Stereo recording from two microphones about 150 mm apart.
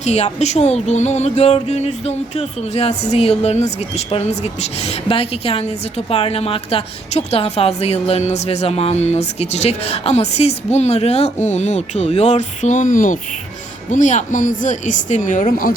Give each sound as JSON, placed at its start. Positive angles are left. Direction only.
{"t": 0.0, "sound": "a woman's voice", "side_deg": 50}